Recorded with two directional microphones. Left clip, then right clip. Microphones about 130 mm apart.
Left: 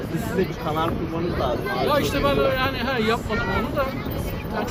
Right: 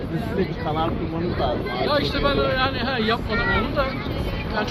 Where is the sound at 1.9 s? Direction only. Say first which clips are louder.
Even; 35° left (ahead or behind).